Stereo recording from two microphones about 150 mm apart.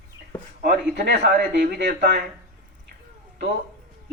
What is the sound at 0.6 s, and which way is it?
Speech, 80° right.